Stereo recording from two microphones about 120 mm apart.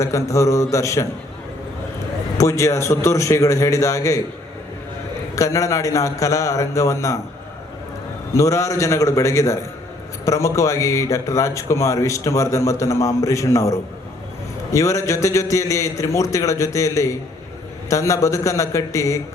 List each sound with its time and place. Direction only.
0.0 s a man's voice: 25° left (ahead or behind)
2.4 s a man's voice: 25° left (ahead or behind)
5.3 s a man's voice: 25° left (ahead or behind)
8.4 s a man's voice: 25° left (ahead or behind)